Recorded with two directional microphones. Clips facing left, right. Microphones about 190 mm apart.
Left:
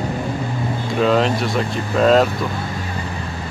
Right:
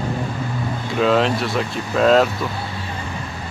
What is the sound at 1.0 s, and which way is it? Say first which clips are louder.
Speech: even; centre (ahead or behind).